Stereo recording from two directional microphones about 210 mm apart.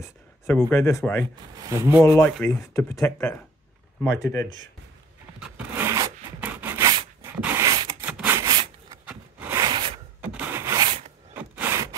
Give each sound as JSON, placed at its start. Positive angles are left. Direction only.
{"t": 0.5, "sound": "speech", "side_deg": 5}
{"t": 1.6, "sound": "speech", "side_deg": -15}
{"t": 2.0, "sound": "speech", "side_deg": 15}
{"t": 5.4, "sound": "rub", "side_deg": -10}
{"t": 7.2, "sound": "a sound", "side_deg": -10}
{"t": 8.0, "sound": "rub", "side_deg": -10}
{"t": 9.0, "sound": "a sound", "side_deg": -10}
{"t": 10.2, "sound": "rub", "side_deg": -5}
{"t": 11.3, "sound": "wood", "side_deg": -10}